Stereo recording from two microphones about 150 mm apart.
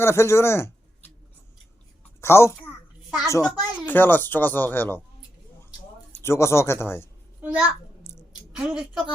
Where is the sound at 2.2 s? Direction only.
15° left (ahead or behind).